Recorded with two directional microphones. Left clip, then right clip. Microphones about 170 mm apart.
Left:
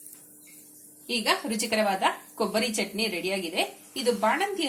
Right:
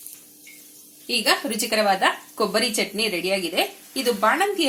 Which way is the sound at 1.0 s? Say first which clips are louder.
Right 5 dB; 25° right (ahead or behind).